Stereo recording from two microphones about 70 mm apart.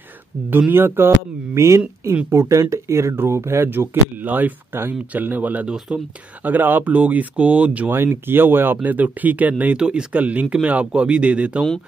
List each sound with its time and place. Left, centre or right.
0.5 s speech: right
6.4 s speech: right
7.9 s speech: right